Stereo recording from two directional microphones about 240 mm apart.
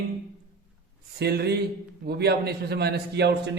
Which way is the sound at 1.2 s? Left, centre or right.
Right.